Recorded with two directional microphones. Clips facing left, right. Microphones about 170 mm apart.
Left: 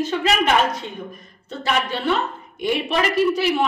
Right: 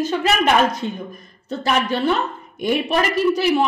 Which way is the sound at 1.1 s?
40° right (ahead or behind).